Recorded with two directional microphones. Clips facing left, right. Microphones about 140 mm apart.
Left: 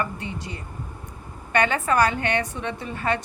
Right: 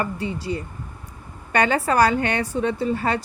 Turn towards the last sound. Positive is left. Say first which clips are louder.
# right 4 dB
turn(degrees=-35)  # may be behind; listen again after turning